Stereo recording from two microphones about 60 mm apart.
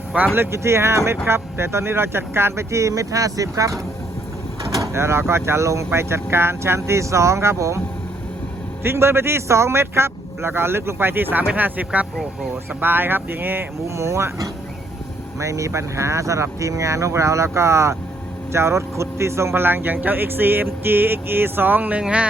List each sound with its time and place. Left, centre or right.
0.3 s speech: right
4.9 s speech: right
8.8 s speech: right
13.8 s speech: right; by 22.3 s centre